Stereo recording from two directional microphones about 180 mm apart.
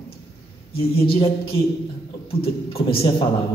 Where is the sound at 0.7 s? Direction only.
30° left (ahead or behind).